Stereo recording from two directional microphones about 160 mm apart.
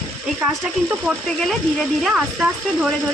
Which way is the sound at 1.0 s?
5° left (ahead or behind).